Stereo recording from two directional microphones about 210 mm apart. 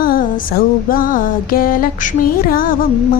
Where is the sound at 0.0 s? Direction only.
45° left (ahead or behind).